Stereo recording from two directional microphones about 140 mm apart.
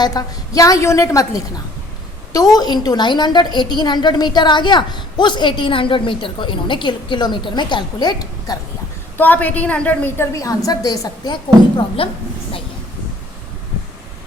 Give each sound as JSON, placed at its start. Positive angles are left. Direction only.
{"t": 0.0, "sound": "a woman's voice", "side_deg": 25}
{"t": 9.1, "sound": "a woman's voice", "side_deg": 15}
{"t": 10.3, "sound": "a woman's voice", "side_deg": 25}
{"t": 12.0, "sound": "a woman's voice", "side_deg": 40}